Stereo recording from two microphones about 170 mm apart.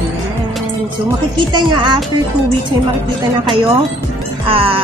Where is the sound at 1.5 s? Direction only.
25° right (ahead or behind).